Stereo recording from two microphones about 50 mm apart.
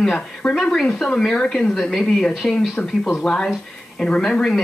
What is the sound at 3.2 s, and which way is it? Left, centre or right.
Speech, centre.